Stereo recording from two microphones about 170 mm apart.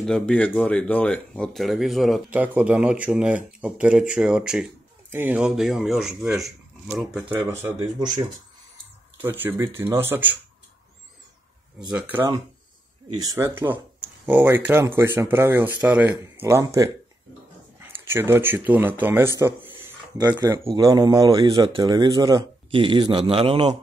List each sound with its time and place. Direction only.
0.0 s speech: 5° left (ahead or behind)
7.3 s speech: 15° right (ahead or behind)
9.2 s speech: 10° right (ahead or behind)
11.9 s speech: 10° right (ahead or behind)
13.1 s speech: 20° right (ahead or behind)
17.9 s speech: 15° right (ahead or behind)
19.8 s a sound: 10° right (ahead or behind)
20.3 s speech: 20° right (ahead or behind)